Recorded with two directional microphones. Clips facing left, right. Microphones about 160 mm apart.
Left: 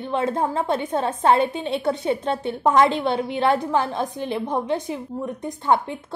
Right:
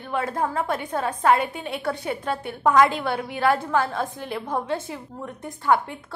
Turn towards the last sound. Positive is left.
turn(degrees=20)  # may be behind; listen again after turning